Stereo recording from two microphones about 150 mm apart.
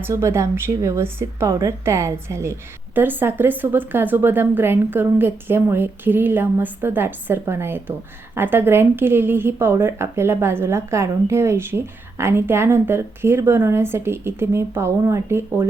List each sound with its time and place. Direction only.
0.0 s a woman's voice: 15° right (ahead or behind)